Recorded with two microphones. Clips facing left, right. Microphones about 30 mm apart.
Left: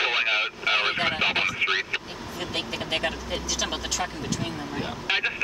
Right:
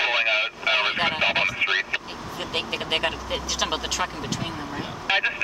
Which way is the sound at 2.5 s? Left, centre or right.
Centre.